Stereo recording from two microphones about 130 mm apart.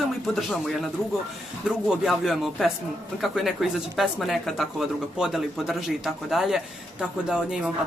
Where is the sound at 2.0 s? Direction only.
Centre (ahead or behind).